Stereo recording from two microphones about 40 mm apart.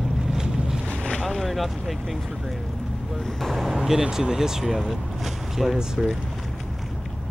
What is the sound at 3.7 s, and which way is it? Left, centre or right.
Speech, centre.